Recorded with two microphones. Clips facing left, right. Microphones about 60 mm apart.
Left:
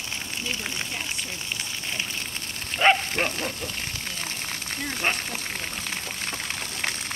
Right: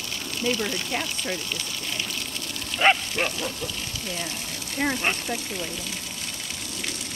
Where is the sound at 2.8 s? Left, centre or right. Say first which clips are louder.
Left 1 dB; centre.